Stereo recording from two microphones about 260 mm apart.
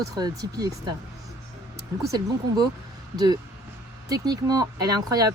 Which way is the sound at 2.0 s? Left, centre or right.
Centre.